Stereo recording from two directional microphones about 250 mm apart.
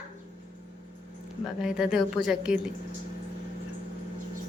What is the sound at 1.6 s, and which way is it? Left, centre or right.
Speech, centre.